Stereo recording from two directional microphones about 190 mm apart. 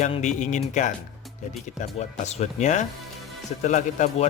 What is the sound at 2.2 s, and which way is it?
A man's voice, 35° left (ahead or behind).